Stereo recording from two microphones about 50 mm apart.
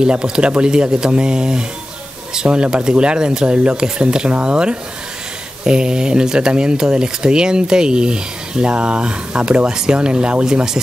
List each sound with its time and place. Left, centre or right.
0.0 s speech: centre